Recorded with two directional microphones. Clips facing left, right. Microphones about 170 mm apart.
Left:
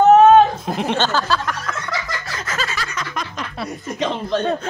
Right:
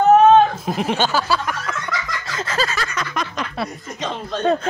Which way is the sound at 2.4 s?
30° right (ahead or behind).